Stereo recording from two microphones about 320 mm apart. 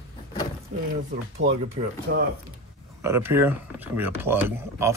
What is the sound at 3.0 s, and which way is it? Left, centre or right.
Speech, centre.